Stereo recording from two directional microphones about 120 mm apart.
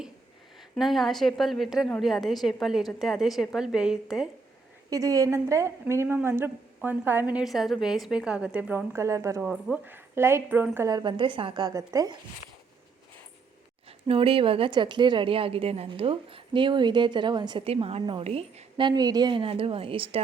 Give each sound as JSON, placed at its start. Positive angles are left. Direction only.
{"t": 0.8, "sound": "a woman's voice", "side_deg": 0}
{"t": 4.9, "sound": "a woman's voice", "side_deg": -30}
{"t": 7.4, "sound": "a woman's voice", "side_deg": 0}
{"t": 9.4, "sound": "a woman's voice", "side_deg": -5}
{"t": 10.8, "sound": "a woman's voice", "side_deg": -35}
{"t": 11.6, "sound": "a woman's voice", "side_deg": -25}
{"t": 14.1, "sound": "a woman's voice", "side_deg": -50}
{"t": 18.8, "sound": "a woman's voice", "side_deg": -35}
{"t": 19.4, "sound": "a woman's voice", "side_deg": -50}